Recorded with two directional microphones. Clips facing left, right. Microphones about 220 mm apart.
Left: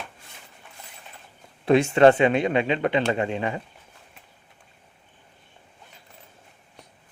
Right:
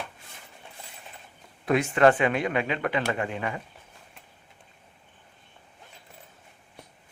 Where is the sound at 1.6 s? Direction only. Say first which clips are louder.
Left 5 dB; 30° left (ahead or behind).